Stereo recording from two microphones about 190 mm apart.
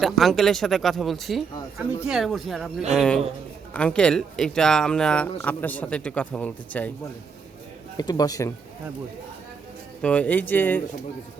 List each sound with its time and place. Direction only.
0.0 s speech: centre (ahead or behind)
7.9 s speech: 20° left (ahead or behind)
10.0 s speech: 5° left (ahead or behind)